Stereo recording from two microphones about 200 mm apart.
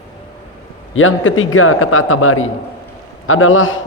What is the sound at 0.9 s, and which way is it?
A man's voice, 80° left.